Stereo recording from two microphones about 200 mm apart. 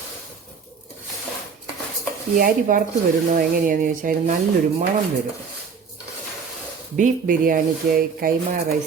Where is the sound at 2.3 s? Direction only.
45° right (ahead or behind).